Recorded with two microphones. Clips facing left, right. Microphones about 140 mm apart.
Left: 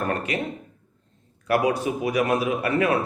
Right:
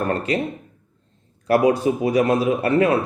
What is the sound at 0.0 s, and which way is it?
Speech, 35° right (ahead or behind).